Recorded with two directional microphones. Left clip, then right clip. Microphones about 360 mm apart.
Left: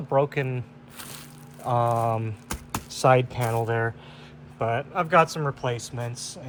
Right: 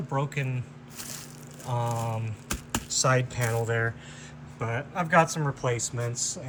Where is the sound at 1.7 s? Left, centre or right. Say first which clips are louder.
Left 8 dB; centre.